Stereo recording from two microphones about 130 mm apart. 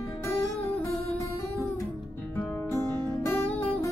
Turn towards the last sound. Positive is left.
turn(degrees=20)  # may be behind; listen again after turning